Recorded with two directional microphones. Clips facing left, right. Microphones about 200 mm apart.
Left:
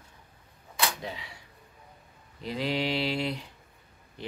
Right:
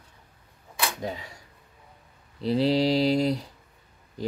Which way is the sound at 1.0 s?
45° right (ahead or behind).